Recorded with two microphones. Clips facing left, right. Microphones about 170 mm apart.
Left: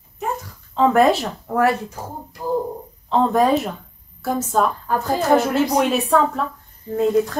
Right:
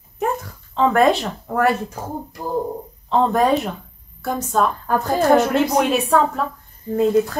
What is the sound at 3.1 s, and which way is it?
A woman's voice, centre (ahead or behind).